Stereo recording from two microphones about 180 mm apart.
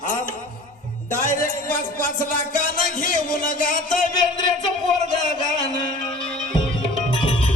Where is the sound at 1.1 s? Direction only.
45° left (ahead or behind).